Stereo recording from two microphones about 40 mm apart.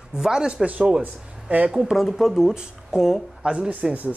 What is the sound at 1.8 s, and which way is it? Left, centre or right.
Speech, centre.